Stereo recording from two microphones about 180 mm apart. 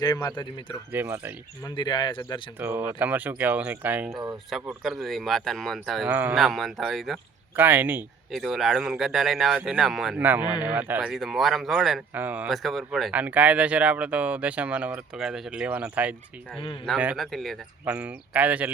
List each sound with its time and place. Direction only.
0.0 s speech: 20° left (ahead or behind)
0.9 s speech: 10° right (ahead or behind)
1.6 s speech: 25° left (ahead or behind)
2.6 s speech: 10° right (ahead or behind)
16.6 s speech: 30° left (ahead or behind)
17.0 s speech: 5° right (ahead or behind)